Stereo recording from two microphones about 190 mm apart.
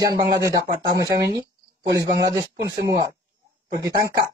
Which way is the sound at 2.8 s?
20° right (ahead or behind).